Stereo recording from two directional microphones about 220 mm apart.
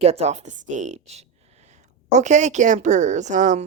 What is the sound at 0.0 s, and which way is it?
Speech, 30° right (ahead or behind).